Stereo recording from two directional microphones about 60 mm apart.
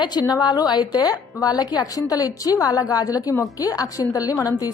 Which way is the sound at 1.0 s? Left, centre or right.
Left.